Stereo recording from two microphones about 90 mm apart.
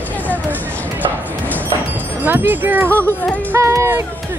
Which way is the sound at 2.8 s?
20° left (ahead or behind).